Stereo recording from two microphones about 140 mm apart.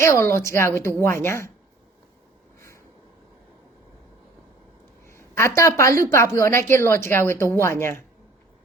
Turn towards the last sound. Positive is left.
turn(degrees=15)  # may be behind; listen again after turning